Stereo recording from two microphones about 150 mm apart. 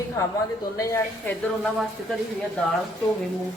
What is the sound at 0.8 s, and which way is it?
Speech, 20° left (ahead or behind).